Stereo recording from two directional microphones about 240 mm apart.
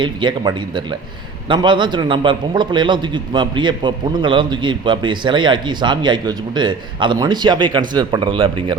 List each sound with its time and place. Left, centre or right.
0.0 s a man's voice: centre